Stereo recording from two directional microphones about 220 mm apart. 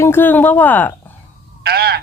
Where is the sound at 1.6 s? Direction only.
45° right (ahead or behind).